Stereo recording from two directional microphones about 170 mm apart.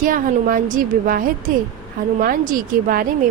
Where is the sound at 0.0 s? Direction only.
55° right (ahead or behind).